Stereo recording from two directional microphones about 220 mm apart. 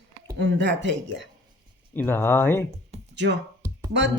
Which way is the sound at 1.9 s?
10° left (ahead or behind).